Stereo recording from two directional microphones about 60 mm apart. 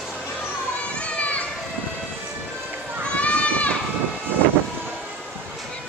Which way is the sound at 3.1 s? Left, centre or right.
Left.